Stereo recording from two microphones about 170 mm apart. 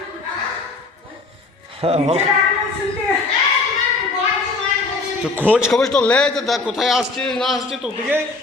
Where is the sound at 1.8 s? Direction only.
35° right (ahead or behind).